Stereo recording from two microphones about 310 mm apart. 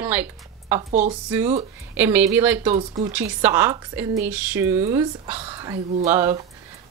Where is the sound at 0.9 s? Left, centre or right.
Right.